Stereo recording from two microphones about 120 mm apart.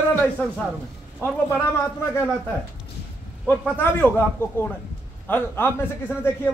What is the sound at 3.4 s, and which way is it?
A man's voice, 15° left (ahead or behind).